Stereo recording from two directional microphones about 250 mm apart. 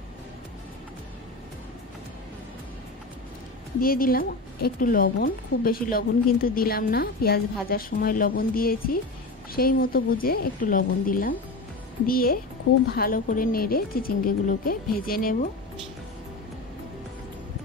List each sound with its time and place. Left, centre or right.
3.8 s a woman's voice: left